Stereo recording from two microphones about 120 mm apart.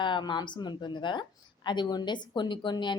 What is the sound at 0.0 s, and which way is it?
A woman's voice, 40° left (ahead or behind).